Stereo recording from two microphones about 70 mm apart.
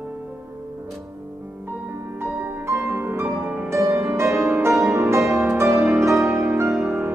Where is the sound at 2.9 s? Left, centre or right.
Right.